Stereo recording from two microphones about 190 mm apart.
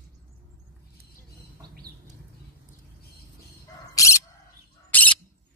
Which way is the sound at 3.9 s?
15° left (ahead or behind).